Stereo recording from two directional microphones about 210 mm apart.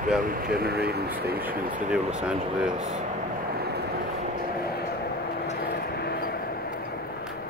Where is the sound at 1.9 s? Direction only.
5° right (ahead or behind).